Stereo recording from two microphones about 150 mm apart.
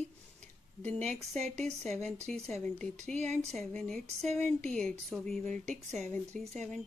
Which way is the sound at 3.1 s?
50° right (ahead or behind).